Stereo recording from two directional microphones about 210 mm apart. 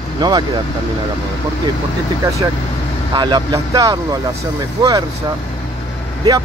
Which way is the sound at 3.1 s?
20° right (ahead or behind).